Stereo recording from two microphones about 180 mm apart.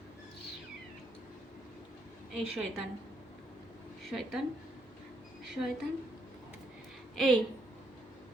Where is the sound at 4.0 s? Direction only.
Centre (ahead or behind).